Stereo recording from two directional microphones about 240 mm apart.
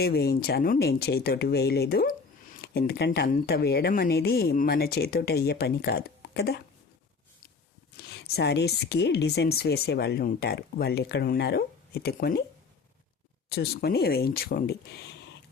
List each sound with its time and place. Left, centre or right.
0.0 s speech: left
7.9 s a woman's voice: left
13.5 s speech: left